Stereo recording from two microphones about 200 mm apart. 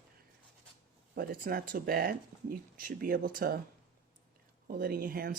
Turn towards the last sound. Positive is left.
turn(degrees=-45)  # may be behind; listen again after turning